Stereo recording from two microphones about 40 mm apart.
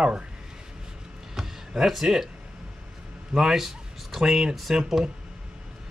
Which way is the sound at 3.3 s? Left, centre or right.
Centre.